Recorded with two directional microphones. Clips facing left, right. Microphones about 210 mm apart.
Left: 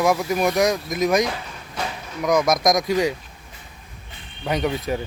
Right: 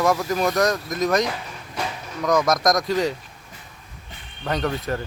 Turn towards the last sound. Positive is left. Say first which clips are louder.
# left 2 dB
turn(degrees=10)  # may be behind; listen again after turning